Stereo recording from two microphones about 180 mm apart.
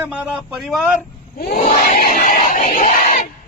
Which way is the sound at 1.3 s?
50° left (ahead or behind).